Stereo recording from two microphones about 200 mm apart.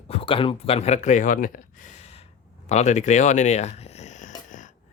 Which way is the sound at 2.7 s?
35° left (ahead or behind).